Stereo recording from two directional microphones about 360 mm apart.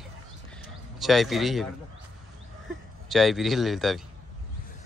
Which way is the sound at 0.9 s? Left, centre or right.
Centre.